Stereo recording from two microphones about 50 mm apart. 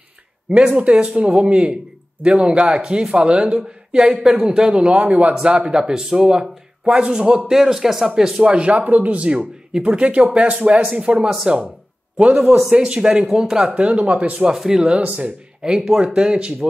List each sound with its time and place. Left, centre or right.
0.5 s speech: right
12.6 s speech: centre
14.5 s speech: centre
15.0 s speech: right
15.6 s speech: centre